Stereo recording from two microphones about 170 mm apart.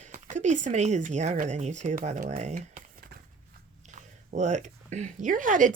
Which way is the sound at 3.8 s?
45° right (ahead or behind).